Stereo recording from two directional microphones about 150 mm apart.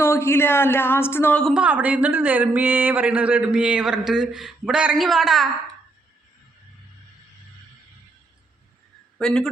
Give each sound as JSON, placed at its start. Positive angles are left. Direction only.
{"t": 0.0, "sound": "speech", "side_deg": 15}
{"t": 1.5, "sound": "speech", "side_deg": -10}
{"t": 9.1, "sound": "speech", "side_deg": 5}